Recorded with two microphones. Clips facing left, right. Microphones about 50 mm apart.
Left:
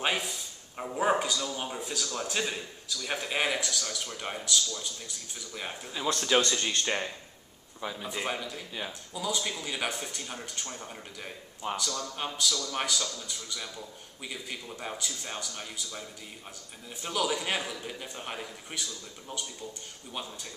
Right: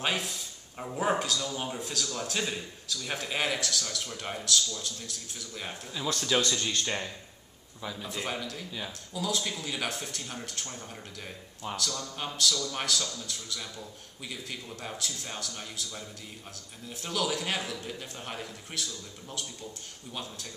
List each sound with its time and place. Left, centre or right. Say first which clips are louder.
0.0 s speech: left 1 dB; centre
6.4 s speech: left 1 dB; left; by 20.5 s centre